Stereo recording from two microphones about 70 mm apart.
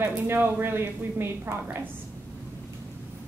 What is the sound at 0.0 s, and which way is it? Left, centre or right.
A woman's voice, right.